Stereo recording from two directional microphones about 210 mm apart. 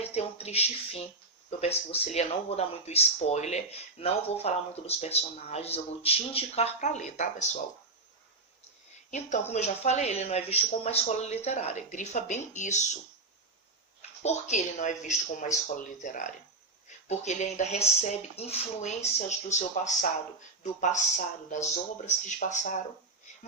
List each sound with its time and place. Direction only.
0.0 s a sound: 30° left (ahead or behind)
1.5 s speech: 30° left (ahead or behind)
9.0 s speech: 35° left (ahead or behind)
14.2 s speech: 35° left (ahead or behind)
21.5 s speech: 35° left (ahead or behind)